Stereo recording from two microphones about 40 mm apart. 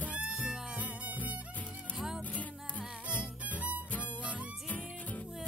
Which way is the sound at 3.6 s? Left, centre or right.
Right.